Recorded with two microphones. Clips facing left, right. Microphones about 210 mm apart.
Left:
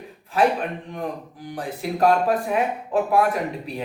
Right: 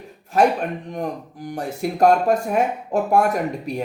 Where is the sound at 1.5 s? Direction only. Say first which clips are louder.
Right 3 dB; 45° right (ahead or behind).